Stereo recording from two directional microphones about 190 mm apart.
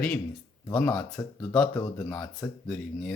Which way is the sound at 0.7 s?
10° left (ahead or behind).